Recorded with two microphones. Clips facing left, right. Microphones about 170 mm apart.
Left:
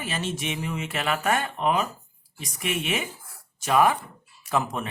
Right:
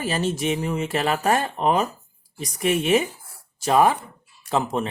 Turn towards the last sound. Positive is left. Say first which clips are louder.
# right 3 dB
turn(degrees=-30)  # may be behind; listen again after turning